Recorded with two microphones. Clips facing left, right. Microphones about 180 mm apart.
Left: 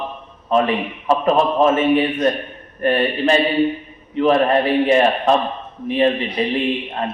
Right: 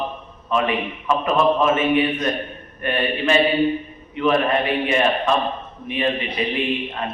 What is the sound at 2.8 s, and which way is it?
A man's voice, 35° left (ahead or behind).